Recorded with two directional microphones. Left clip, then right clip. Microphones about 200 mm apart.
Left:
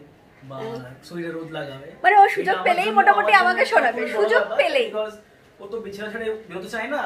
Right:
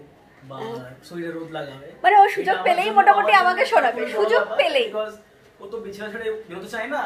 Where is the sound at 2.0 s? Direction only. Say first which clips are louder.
Even; 5° right (ahead or behind).